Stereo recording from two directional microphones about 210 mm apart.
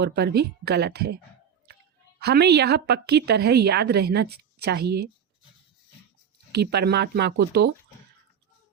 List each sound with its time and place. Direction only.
0.0 s a woman's voice: 50° right (ahead or behind)
2.2 s a woman's voice: 50° right (ahead or behind)
6.5 s a woman's voice: 50° right (ahead or behind)